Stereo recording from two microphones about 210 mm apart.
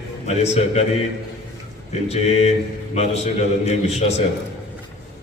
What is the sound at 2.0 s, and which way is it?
A man's voice, 30° left (ahead or behind).